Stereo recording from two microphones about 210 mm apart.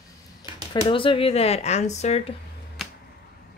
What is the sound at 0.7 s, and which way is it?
Speech, 25° left (ahead or behind).